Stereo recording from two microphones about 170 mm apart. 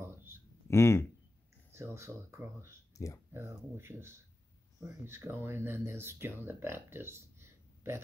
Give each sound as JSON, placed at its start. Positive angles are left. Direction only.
{"t": 0.0, "sound": "a sound", "side_deg": -15}
{"t": 0.7, "sound": "speech", "side_deg": 15}
{"t": 1.7, "sound": "speech", "side_deg": -15}